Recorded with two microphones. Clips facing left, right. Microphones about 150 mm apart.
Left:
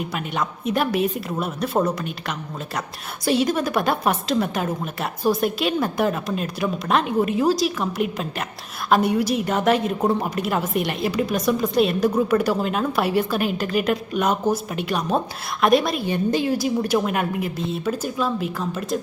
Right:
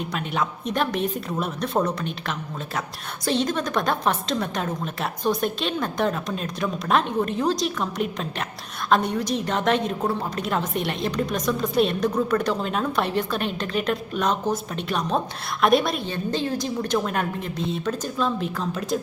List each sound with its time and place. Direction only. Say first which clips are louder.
0.0 s a woman's voice: even; 5° left (ahead or behind)
10.0 s a woman's voice: left 4 dB; 15° left (ahead or behind)
10.3 s a woman's voice: left 3 dB; 5° left (ahead or behind)
16.0 s a woman's voice: left 5 dB; 10° left (ahead or behind)